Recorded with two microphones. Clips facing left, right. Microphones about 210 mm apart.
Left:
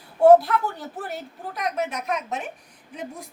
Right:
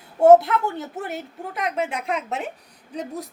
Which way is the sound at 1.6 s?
30° right (ahead or behind).